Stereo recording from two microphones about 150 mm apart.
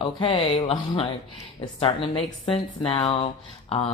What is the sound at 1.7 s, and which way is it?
A woman's voice, 40° left (ahead or behind).